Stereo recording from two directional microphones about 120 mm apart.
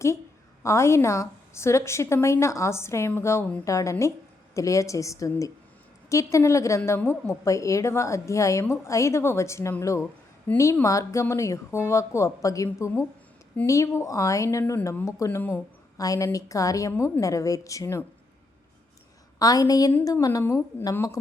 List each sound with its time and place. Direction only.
0.6 s a woman's voice: 25° left (ahead or behind)
10.5 s speech: 15° left (ahead or behind)
10.8 s a woman's voice: 25° left (ahead or behind)
19.4 s a woman's voice: 30° left (ahead or behind)